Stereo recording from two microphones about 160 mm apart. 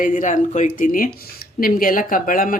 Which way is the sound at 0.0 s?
55° left (ahead or behind).